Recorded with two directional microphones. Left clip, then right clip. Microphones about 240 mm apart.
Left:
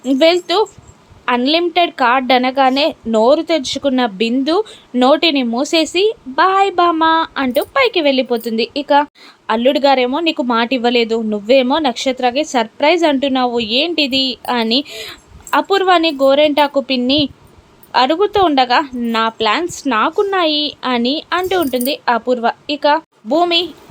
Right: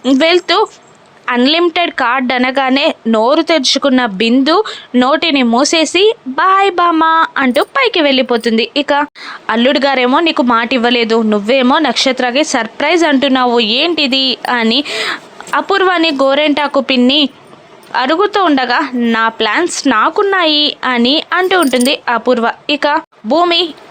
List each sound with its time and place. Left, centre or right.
0.0 s a woman's voice: centre